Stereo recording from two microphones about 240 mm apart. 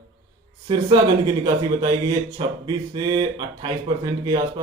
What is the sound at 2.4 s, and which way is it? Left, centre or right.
Speech, centre.